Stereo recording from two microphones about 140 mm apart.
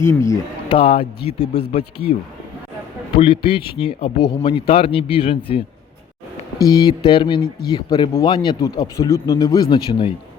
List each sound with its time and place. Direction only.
0.0 s speech: 20° left (ahead or behind)
0.7 s speech: 40° left (ahead or behind)
3.2 s speech: 40° left (ahead or behind)
6.7 s speech: 30° left (ahead or behind)